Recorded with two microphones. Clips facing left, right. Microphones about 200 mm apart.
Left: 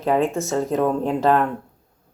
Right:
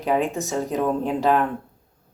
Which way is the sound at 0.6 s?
Centre (ahead or behind).